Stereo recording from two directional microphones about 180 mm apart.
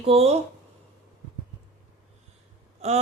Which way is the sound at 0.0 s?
35° right (ahead or behind).